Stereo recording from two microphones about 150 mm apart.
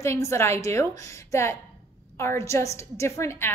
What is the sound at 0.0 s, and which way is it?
A woman's voice, 20° left (ahead or behind).